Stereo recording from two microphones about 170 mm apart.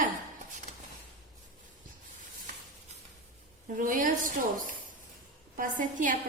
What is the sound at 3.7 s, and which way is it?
A woman's voice, 50° right (ahead or behind).